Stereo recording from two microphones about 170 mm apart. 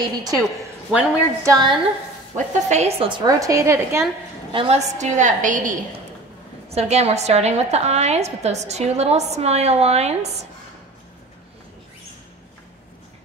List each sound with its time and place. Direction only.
0.9 s a woman's voice: 20° right (ahead or behind)
2.3 s a woman's voice: 40° right (ahead or behind)
3.1 s a woman's voice: 25° right (ahead or behind)
4.5 s a woman's voice: 35° right (ahead or behind); by 5.8 s 50° right (ahead or behind)
6.7 s a woman's voice: 40° right (ahead or behind)